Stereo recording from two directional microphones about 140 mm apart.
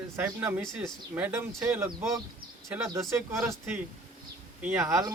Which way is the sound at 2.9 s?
20° right (ahead or behind).